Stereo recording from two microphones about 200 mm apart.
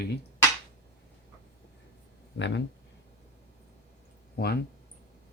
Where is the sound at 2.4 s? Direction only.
65° left (ahead or behind).